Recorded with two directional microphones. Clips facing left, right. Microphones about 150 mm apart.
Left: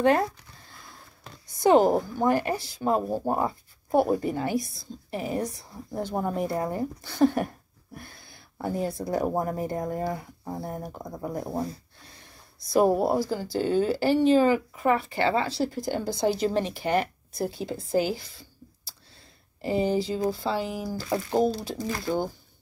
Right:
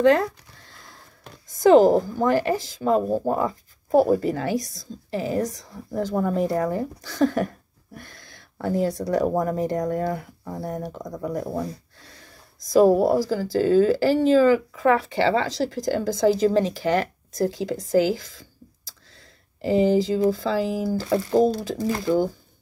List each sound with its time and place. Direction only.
1.5 s speech: 90° right
17.9 s a sound: 90° right
19.6 s speech: 90° right
21.1 s speech: 45° right (ahead or behind)
22.0 s speech: 90° right